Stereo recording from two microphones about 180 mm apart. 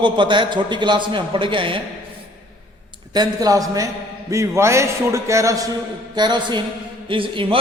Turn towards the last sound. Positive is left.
turn(degrees=-30)  # may be behind; listen again after turning